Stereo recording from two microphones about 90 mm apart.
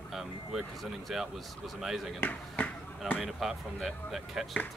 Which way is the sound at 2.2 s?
20° left (ahead or behind).